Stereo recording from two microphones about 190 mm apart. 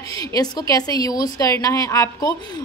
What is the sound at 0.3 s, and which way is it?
A woman's voice, 20° left (ahead or behind).